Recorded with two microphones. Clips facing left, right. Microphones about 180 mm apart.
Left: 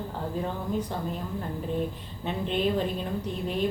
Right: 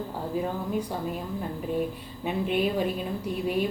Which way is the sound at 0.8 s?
10° right (ahead or behind).